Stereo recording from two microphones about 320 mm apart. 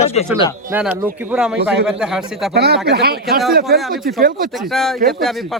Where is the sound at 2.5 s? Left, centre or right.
Right.